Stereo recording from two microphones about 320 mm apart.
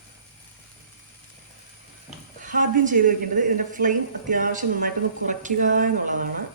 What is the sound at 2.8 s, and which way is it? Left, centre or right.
Speech, right.